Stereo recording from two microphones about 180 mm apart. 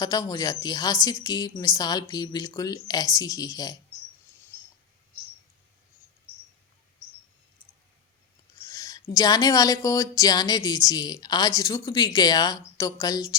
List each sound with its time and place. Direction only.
0.0 s speech: 20° left (ahead or behind)
8.6 s speech: 20° left (ahead or behind)